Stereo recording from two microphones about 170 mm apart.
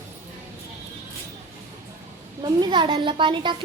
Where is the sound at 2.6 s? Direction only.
25° right (ahead or behind).